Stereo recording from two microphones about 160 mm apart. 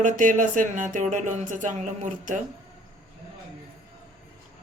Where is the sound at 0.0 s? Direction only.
55° right (ahead or behind).